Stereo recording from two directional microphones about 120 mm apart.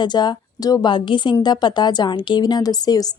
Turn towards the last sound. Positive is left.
turn(degrees=30)  # may be behind; listen again after turning